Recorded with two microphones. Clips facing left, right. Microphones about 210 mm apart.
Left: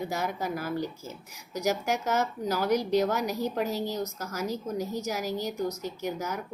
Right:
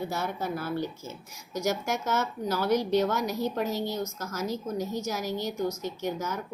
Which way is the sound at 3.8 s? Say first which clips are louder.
Even; 35° left (ahead or behind).